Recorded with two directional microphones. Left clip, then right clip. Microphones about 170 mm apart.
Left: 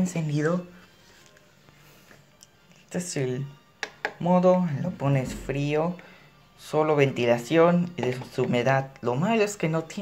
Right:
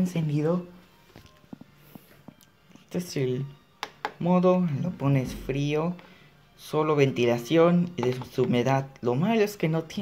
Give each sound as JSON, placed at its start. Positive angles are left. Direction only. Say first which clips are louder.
{"t": 0.0, "sound": "speech", "louder": "even", "side_deg": -30}
{"t": 2.9, "sound": "speech", "louder": "even", "side_deg": -25}